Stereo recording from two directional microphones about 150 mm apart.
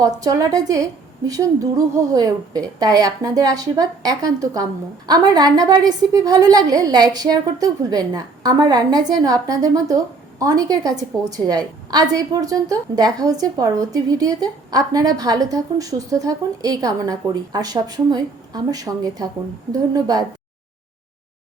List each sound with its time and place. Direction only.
0.0 s a woman's voice: 25° right (ahead or behind)